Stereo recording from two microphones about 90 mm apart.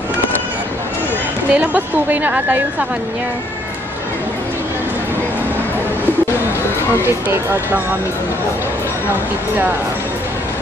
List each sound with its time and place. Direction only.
1.5 s a woman's voice: 15° right (ahead or behind)
7.1 s speech: 25° right (ahead or behind)